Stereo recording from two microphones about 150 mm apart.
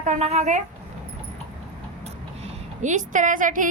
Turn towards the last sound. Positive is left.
turn(degrees=-60)  # may be behind; listen again after turning